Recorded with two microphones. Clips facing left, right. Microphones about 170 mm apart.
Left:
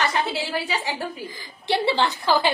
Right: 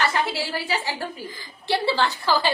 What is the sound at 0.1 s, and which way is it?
A woman's voice, 20° left (ahead or behind).